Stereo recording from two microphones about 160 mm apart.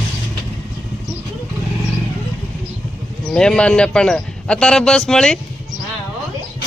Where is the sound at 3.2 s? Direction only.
5° left (ahead or behind).